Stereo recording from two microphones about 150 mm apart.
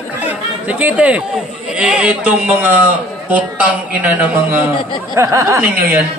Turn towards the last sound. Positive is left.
turn(degrees=-15)  # may be behind; listen again after turning